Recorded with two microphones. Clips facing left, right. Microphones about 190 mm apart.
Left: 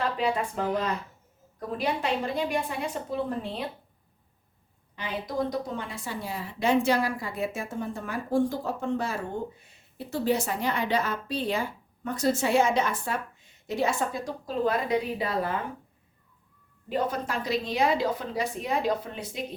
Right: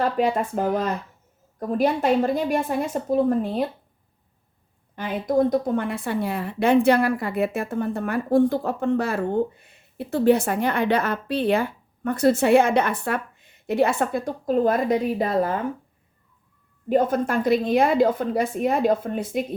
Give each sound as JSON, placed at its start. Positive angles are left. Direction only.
{"t": 0.0, "sound": "a woman's voice", "side_deg": -50}
{"t": 4.9, "sound": "a woman's voice", "side_deg": -50}
{"t": 16.9, "sound": "a woman's voice", "side_deg": -50}